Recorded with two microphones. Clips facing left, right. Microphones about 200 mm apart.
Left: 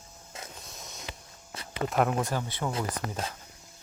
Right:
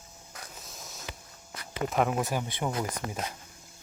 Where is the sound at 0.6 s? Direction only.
Centre (ahead or behind).